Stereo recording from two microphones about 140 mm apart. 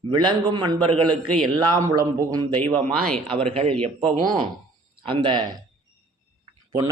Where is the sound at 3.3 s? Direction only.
45° right (ahead or behind).